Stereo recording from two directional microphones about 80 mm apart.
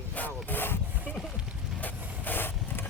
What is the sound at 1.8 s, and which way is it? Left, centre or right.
Vehicle, left.